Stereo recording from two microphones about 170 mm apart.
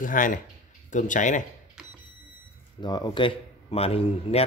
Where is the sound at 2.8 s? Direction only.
25° left (ahead or behind).